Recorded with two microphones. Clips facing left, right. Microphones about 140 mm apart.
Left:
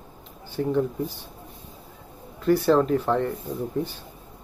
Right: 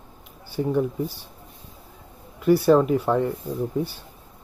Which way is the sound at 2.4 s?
10° right (ahead or behind).